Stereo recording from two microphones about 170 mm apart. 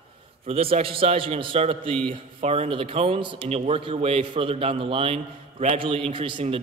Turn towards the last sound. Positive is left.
turn(degrees=-30)  # may be behind; listen again after turning